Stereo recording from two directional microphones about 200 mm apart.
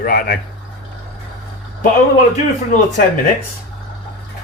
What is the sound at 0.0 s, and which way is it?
Speech, 45° left (ahead or behind).